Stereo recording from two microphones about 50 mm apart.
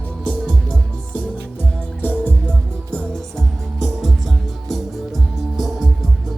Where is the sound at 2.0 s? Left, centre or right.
Left.